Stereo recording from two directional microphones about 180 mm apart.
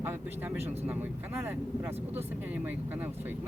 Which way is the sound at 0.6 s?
35° right (ahead or behind).